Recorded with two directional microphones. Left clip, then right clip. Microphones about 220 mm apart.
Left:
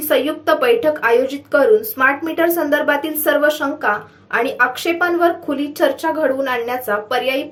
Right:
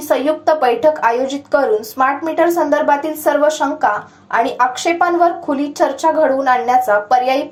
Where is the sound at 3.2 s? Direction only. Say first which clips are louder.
Left 1 dB; 20° left (ahead or behind).